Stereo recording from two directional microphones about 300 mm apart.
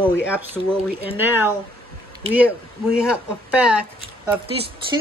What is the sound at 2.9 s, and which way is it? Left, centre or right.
Speech, centre.